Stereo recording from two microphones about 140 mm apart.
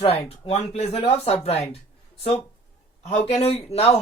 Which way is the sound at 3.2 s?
45° left (ahead or behind).